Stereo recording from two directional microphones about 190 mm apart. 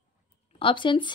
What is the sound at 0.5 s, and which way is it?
Speech, 25° left (ahead or behind).